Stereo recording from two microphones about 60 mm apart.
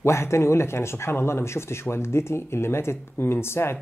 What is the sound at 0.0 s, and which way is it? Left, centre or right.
Speech, left.